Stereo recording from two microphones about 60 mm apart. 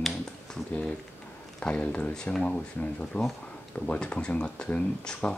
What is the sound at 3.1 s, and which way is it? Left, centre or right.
Speech, left.